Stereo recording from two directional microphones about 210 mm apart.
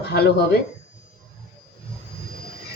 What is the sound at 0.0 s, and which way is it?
Speech, 50° left (ahead or behind).